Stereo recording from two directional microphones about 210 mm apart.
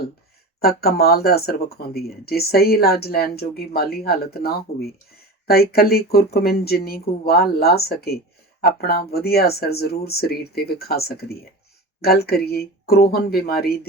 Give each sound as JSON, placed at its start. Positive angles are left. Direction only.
{"t": 0.6, "sound": "speech", "side_deg": 45}